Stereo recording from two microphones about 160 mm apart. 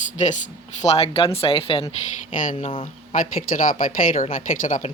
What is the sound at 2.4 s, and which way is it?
Speech, 55° left (ahead or behind).